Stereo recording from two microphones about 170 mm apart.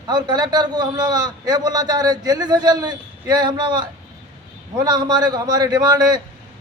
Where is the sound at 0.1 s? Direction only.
25° right (ahead or behind).